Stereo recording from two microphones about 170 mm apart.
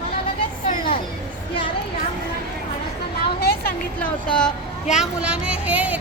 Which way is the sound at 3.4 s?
65° left (ahead or behind).